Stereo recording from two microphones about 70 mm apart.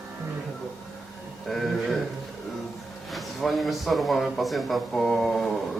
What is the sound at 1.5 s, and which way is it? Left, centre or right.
Speech, centre.